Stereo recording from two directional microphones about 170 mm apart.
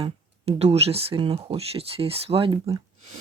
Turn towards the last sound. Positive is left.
turn(degrees=-25)  # may be behind; listen again after turning